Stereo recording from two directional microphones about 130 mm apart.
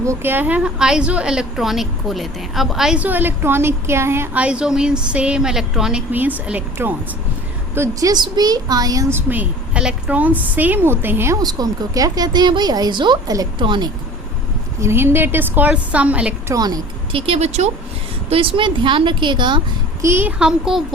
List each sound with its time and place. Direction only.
0.0 s a woman's voice: 20° right (ahead or behind)
7.8 s a woman's voice: 25° right (ahead or behind)
11.4 s speech: 30° right (ahead or behind)
14.8 s a woman's voice: 20° right (ahead or behind)
16.5 s a woman's voice: 30° right (ahead or behind)
17.1 s speech: 45° right (ahead or behind)
18.3 s speech: 45° right (ahead or behind)
20.0 s a woman's voice: 20° right (ahead or behind)
20.4 s speech: 5° right (ahead or behind)